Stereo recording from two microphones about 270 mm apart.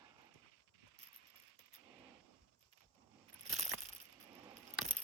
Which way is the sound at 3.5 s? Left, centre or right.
Right.